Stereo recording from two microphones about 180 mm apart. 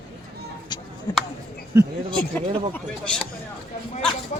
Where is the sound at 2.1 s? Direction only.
5° left (ahead or behind).